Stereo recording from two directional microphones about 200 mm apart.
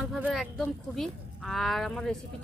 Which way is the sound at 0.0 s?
5° right (ahead or behind).